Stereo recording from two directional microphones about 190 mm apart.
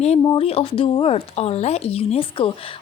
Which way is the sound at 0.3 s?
30° left (ahead or behind).